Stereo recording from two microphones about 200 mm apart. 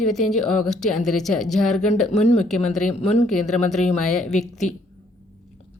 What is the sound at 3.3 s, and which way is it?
Speech, centre (ahead or behind).